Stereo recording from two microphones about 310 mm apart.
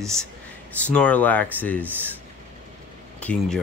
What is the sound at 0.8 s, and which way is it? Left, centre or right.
Speech, centre.